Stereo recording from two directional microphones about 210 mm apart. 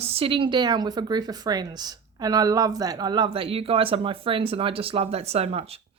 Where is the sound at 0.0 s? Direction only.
30° right (ahead or behind).